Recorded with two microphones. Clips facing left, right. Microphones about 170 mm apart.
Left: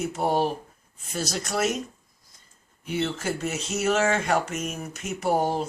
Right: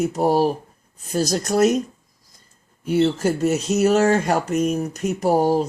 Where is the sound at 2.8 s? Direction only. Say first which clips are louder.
Right 9 dB; 40° right (ahead or behind).